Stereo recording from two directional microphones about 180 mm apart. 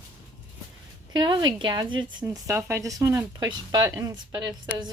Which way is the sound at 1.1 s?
25° right (ahead or behind).